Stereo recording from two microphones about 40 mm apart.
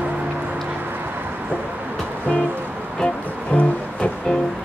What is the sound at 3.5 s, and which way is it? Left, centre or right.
Music, left.